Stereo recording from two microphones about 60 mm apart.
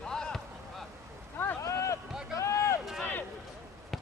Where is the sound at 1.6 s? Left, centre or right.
Left.